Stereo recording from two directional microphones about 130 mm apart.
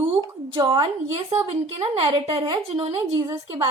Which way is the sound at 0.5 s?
35° right (ahead or behind).